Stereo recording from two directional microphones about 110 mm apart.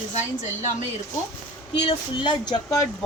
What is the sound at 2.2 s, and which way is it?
Speech, 40° left (ahead or behind).